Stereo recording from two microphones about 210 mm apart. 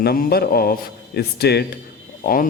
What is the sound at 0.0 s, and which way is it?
A man's voice, 45° left (ahead or behind).